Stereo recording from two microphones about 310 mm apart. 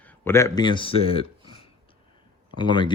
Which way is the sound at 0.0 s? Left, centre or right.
Centre.